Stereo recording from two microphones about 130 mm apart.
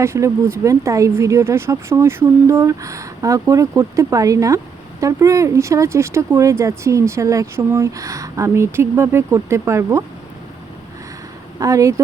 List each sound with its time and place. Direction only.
0.0 s speech: 20° right (ahead or behind)
11.6 s speech: 25° right (ahead or behind)